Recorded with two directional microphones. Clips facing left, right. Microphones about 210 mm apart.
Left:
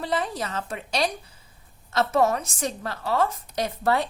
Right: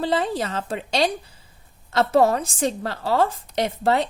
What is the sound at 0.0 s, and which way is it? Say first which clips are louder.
A woman's voice: right 5 dB; 30° right (ahead or behind).